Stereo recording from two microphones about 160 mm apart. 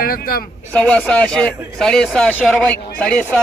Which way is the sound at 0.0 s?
65° left (ahead or behind).